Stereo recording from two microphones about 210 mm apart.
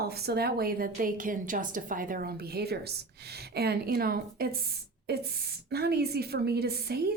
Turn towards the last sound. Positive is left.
turn(degrees=-50)  # may be behind; listen again after turning